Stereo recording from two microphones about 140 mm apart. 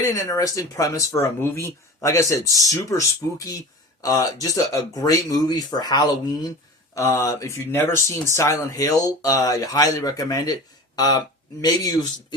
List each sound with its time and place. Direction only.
0.0 s speech: 25° left (ahead or behind)